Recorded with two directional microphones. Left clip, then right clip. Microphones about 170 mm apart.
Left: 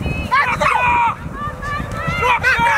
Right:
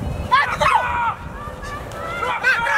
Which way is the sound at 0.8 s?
15° left (ahead or behind).